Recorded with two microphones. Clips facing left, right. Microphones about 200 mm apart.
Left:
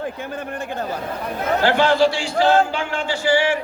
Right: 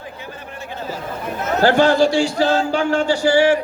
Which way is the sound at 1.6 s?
45° right (ahead or behind).